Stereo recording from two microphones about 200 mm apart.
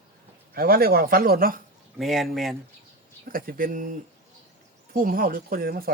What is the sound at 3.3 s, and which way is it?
Speech, 45° right (ahead or behind).